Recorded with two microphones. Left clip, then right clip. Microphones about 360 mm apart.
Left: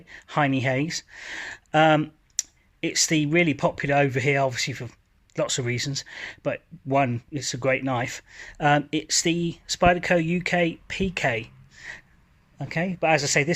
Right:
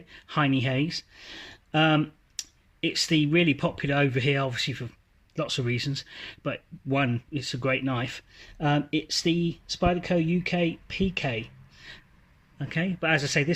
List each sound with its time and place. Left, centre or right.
0.1 s speech: centre
10.8 s a sound: centre
12.5 s speech: centre